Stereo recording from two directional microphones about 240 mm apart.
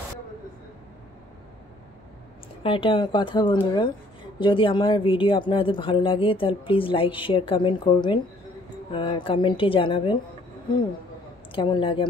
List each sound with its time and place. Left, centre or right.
2.6 s speech: left
11.5 s speech: left